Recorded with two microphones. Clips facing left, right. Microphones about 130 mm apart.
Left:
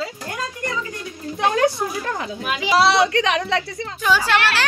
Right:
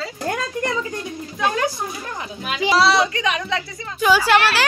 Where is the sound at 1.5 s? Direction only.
70° left (ahead or behind).